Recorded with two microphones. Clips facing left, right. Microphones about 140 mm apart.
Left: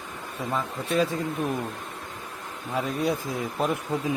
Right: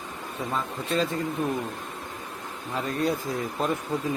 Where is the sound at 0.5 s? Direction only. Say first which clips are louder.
Left 2 dB; 5° left (ahead or behind).